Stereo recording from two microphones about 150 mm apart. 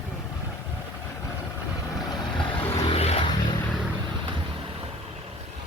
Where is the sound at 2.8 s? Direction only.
40° left (ahead or behind).